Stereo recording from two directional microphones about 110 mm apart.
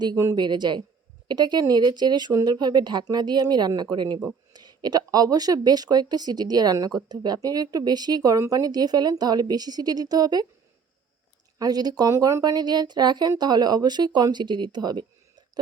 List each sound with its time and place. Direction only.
0.3 s speech: 40° right (ahead or behind)
11.6 s speech: 35° right (ahead or behind)